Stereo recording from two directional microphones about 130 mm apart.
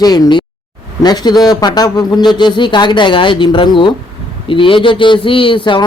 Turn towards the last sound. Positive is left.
turn(degrees=35)  # may be behind; listen again after turning